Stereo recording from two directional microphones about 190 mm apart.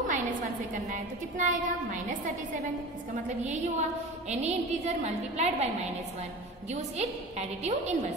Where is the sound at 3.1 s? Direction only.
40° right (ahead or behind).